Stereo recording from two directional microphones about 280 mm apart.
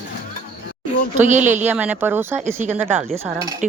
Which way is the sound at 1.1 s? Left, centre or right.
Right.